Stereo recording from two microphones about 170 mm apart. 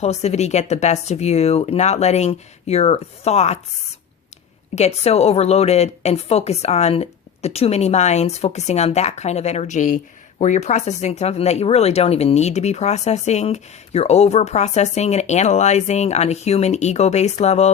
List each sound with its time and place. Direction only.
0.0 s a woman's voice: 40° left (ahead or behind)
4.7 s a woman's voice: 40° left (ahead or behind)